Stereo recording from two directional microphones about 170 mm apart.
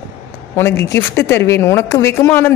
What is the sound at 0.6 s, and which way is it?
A woman's voice, 15° left (ahead or behind).